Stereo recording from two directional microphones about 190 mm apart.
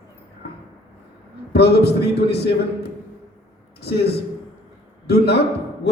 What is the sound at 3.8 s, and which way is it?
A man's voice, 60° left (ahead or behind).